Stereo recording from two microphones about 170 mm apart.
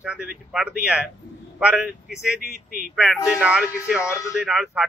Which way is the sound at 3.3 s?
5° right (ahead or behind).